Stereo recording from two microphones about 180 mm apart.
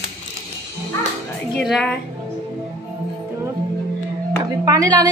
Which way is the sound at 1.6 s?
Centre (ahead or behind).